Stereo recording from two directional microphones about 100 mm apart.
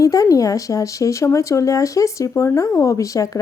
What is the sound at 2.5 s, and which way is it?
Speech, 30° left (ahead or behind).